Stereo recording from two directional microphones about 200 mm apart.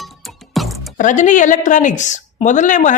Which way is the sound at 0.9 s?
40° left (ahead or behind).